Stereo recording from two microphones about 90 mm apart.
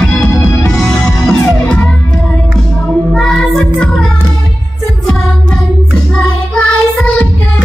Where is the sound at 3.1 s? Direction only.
5° left (ahead or behind).